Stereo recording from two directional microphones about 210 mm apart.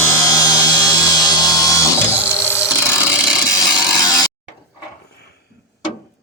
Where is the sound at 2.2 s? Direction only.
10° left (ahead or behind).